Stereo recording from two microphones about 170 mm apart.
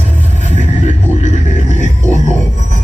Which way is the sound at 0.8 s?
45° left (ahead or behind).